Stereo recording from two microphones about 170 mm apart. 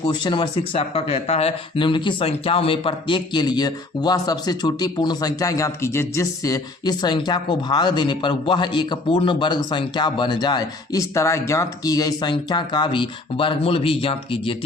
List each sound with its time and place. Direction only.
0.1 s speech: 25° left (ahead or behind)